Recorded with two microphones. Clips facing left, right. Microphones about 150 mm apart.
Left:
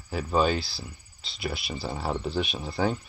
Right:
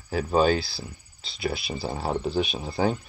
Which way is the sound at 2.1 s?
40° right (ahead or behind).